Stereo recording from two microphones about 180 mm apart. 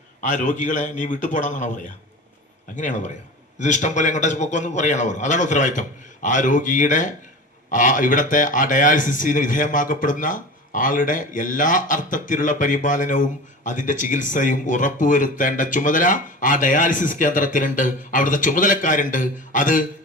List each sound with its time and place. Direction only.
0.2 s speech: 45° left (ahead or behind)